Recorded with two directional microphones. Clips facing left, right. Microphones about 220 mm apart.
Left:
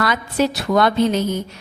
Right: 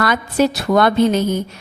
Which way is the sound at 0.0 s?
55° right (ahead or behind).